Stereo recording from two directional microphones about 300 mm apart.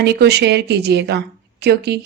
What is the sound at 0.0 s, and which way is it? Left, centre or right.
A woman's voice, right.